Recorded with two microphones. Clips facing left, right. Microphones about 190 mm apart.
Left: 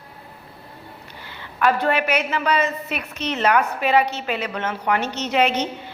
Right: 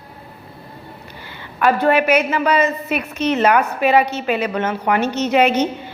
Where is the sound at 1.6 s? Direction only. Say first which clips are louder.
Right 4 dB; 5° right (ahead or behind).